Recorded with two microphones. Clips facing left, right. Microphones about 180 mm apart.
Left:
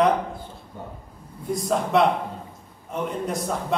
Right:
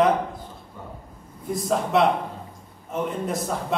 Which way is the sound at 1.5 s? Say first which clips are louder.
Even; centre (ahead or behind).